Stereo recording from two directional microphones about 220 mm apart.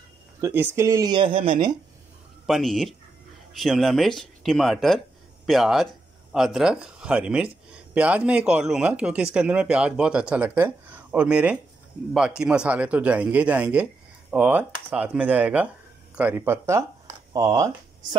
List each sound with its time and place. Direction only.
0.4 s speech: 10° right (ahead or behind)
2.4 s speech: centre (ahead or behind); by 17.6 s 15° right (ahead or behind)